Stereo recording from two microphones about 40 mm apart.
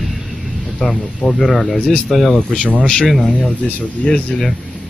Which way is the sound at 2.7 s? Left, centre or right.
Left.